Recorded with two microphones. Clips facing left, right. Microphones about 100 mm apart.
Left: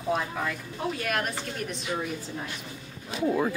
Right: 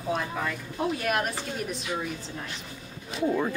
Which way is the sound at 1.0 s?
5° right (ahead or behind).